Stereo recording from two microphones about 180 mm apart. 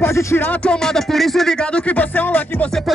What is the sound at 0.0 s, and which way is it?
Speech, 15° left (ahead or behind).